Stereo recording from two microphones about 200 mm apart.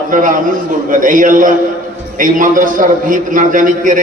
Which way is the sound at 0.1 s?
40° right (ahead or behind).